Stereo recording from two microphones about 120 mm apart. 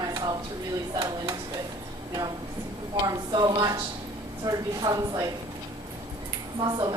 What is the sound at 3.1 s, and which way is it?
Speech, 30° right (ahead or behind).